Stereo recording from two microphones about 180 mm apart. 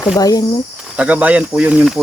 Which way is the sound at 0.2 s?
20° left (ahead or behind).